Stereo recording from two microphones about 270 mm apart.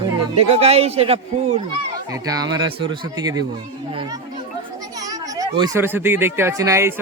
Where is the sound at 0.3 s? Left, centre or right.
Right.